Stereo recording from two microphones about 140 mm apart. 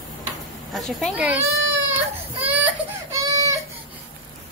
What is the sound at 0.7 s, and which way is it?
Speech, centre (ahead or behind).